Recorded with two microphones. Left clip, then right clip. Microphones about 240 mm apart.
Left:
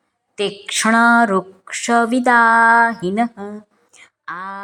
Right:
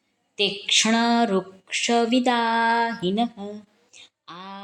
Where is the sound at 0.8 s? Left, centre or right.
Centre.